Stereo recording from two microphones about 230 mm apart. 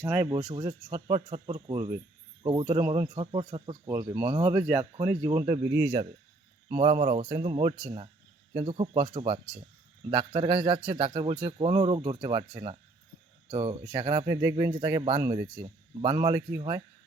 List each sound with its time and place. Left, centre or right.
0.0 s a man's voice: centre